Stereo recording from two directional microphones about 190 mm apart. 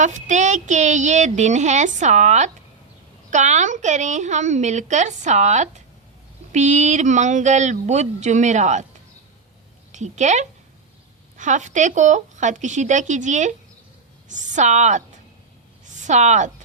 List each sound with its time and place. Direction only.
0.0 s a woman's voice: 40° right (ahead or behind)
9.9 s a woman's voice: 40° right (ahead or behind)